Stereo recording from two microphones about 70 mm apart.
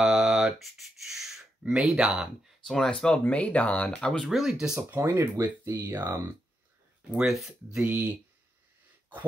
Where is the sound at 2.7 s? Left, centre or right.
Centre.